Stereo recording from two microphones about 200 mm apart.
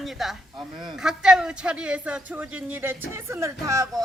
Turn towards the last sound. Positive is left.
turn(degrees=-15)  # may be behind; listen again after turning